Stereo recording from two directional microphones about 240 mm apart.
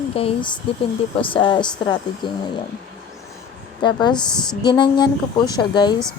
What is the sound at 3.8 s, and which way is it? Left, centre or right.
Speech, centre.